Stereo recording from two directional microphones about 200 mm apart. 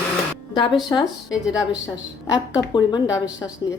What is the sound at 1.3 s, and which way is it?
Speech, 5° right (ahead or behind).